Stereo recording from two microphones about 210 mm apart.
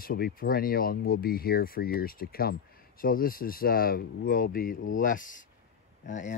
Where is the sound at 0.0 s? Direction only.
45° left (ahead or behind).